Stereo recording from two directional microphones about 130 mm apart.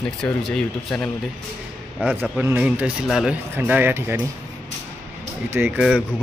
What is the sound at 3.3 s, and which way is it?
Speech, 15° right (ahead or behind).